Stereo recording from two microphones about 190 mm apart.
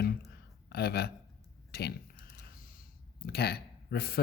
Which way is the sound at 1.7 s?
60° left (ahead or behind).